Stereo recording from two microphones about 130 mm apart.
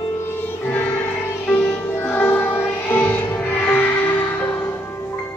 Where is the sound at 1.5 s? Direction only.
10° left (ahead or behind).